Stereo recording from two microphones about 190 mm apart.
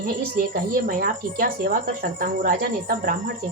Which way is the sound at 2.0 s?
50° right (ahead or behind).